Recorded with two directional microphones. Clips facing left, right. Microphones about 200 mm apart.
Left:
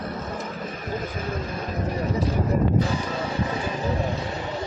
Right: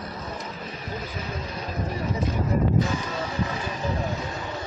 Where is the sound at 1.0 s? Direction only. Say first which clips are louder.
Left 4 dB; 50° left (ahead or behind).